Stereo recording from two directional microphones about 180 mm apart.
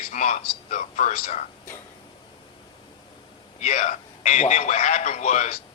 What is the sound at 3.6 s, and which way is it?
Speech, 35° left (ahead or behind).